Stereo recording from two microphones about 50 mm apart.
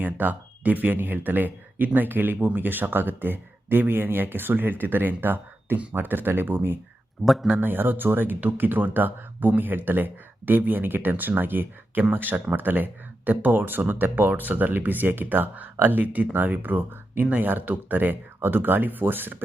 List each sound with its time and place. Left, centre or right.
0.0 s speech: right
7.3 s speech: centre
7.5 s speech: right